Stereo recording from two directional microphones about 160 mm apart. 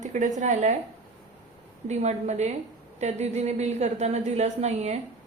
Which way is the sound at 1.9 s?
45° right (ahead or behind).